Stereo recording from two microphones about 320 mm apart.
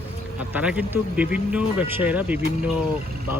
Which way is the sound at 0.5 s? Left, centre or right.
Centre.